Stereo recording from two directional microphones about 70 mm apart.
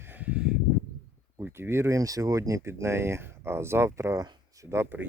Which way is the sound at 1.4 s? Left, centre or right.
Right.